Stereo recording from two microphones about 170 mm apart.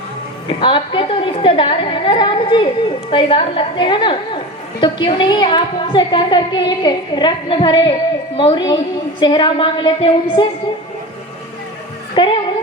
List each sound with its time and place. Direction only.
0.4 s a woman's voice: 30° left (ahead or behind)
12.2 s a woman's voice: 25° left (ahead or behind)